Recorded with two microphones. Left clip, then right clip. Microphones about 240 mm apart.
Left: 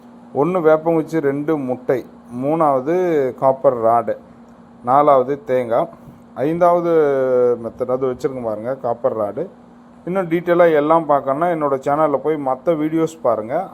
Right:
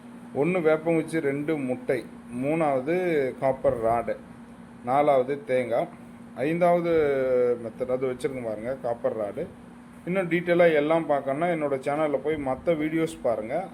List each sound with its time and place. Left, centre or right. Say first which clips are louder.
0.3 s a man's voice: left 9 dB; centre